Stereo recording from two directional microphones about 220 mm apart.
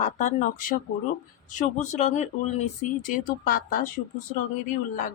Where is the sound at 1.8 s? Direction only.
30° left (ahead or behind).